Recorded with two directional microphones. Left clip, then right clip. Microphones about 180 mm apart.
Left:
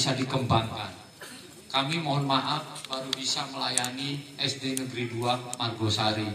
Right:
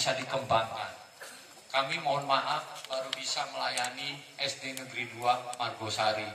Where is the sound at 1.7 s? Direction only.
25° right (ahead or behind).